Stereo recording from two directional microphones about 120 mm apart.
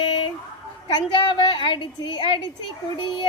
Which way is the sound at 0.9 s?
40° left (ahead or behind).